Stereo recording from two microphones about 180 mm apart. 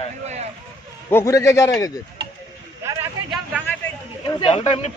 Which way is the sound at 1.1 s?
15° left (ahead or behind).